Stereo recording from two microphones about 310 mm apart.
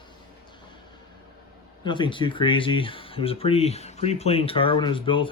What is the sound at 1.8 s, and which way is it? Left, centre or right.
Speech, centre.